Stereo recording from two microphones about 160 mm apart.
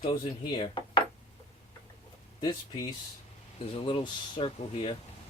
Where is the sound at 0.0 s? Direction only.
30° left (ahead or behind).